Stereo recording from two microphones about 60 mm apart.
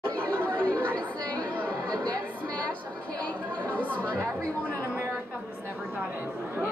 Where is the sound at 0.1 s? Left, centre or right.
Centre.